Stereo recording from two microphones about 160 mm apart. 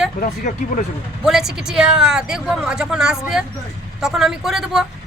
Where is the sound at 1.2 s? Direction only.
5° right (ahead or behind).